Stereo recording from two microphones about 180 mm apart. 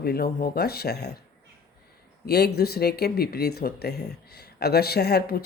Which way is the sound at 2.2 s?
65° left (ahead or behind).